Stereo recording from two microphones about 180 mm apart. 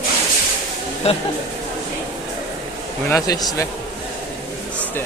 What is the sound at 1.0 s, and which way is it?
Speech, 35° left (ahead or behind).